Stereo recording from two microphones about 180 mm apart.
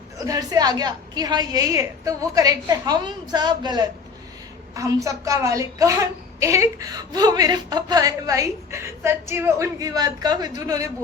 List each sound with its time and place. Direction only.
0.3 s a woman's voice: 20° right (ahead or behind)